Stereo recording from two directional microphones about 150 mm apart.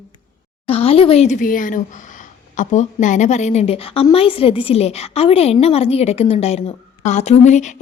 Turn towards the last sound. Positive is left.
turn(degrees=50)  # may be behind; listen again after turning